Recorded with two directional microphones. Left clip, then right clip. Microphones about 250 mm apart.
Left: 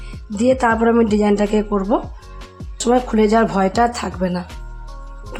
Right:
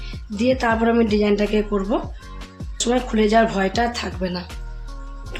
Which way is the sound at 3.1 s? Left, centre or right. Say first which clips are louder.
Left 2 dB; left.